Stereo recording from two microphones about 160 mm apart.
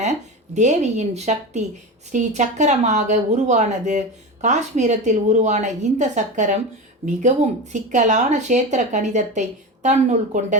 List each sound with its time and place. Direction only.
0.0 s a woman's voice: 45° right (ahead or behind)